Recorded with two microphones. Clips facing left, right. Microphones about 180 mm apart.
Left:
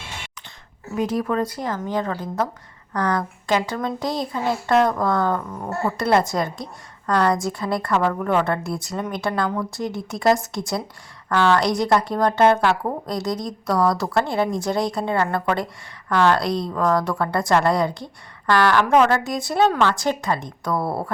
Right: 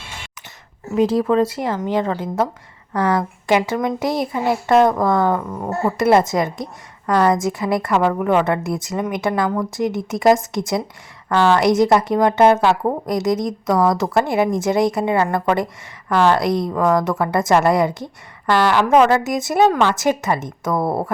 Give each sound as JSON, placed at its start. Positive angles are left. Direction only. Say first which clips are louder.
{"t": 0.9, "sound": "a woman's voice", "louder": "right 6 dB", "side_deg": -25}
{"t": 18.9, "sound": "a woman's voice", "louder": "right 3 dB", "side_deg": -10}